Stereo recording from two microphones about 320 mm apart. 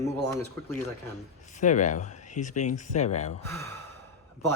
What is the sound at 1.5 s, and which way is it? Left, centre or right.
Speech, left.